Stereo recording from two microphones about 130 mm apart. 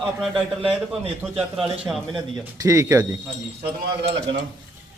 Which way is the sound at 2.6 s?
25° right (ahead or behind).